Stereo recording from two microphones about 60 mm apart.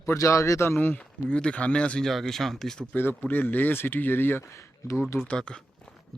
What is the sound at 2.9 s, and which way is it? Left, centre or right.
Speech, left.